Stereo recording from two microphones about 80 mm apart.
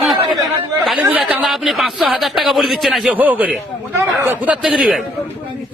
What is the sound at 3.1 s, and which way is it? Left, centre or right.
Speech, right.